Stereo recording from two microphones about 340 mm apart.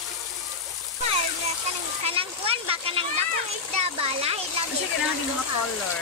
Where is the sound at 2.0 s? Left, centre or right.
Centre.